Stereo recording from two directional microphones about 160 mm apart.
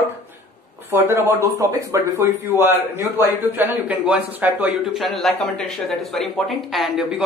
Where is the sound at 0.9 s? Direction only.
15° right (ahead or behind).